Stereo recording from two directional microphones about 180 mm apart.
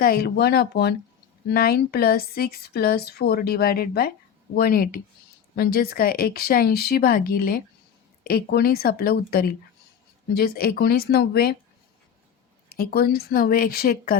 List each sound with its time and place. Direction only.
0.0 s speech: 60° left (ahead or behind)
12.6 s speech: 55° left (ahead or behind)